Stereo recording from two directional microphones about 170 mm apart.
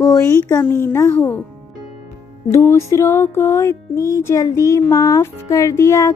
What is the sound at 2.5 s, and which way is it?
Speech, 15° left (ahead or behind).